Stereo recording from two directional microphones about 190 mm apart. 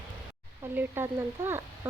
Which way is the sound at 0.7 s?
10° right (ahead or behind).